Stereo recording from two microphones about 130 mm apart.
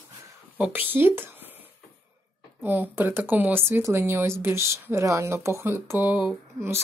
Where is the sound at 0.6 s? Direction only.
15° right (ahead or behind).